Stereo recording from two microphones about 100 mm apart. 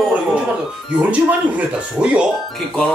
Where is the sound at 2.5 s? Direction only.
10° left (ahead or behind).